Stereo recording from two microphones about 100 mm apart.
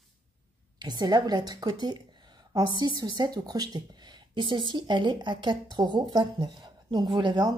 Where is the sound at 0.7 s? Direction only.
45° right (ahead or behind).